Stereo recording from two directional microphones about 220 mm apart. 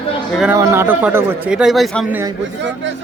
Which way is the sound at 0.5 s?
15° right (ahead or behind).